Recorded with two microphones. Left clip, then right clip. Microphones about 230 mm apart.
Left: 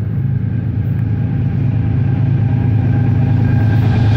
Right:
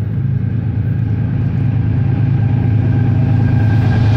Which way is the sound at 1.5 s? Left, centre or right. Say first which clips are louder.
Even; right.